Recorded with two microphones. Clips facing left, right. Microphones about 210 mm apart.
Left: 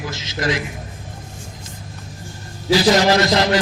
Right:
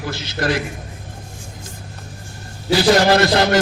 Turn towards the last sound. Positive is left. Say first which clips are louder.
# right 2 dB
turn(degrees=-60)  # may be behind; listen again after turning